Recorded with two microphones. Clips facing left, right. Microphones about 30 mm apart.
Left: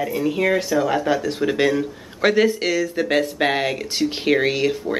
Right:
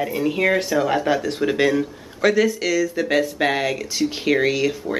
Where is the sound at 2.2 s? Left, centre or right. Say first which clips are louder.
Left 1 dB; left.